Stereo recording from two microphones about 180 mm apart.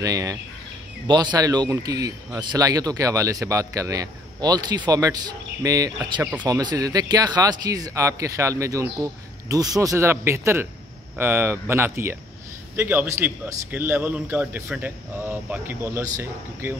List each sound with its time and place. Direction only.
0.0 s speech: 20° right (ahead or behind)